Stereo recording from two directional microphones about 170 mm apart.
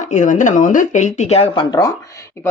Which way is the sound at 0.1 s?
45° left (ahead or behind).